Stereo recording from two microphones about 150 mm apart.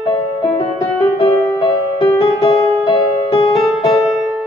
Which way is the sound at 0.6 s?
40° left (ahead or behind).